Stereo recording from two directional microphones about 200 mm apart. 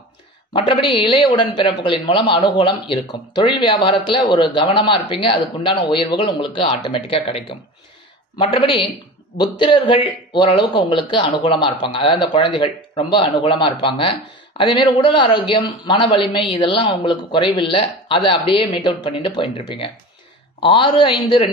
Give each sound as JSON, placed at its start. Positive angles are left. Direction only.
{"t": 0.5, "sound": "speech", "side_deg": 25}
{"t": 20.6, "sound": "speech", "side_deg": 25}